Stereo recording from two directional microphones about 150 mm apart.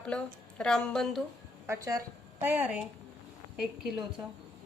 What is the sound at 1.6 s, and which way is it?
A woman's voice, 20° right (ahead or behind).